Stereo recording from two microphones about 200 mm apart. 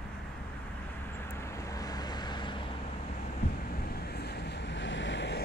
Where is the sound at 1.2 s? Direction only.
10° left (ahead or behind).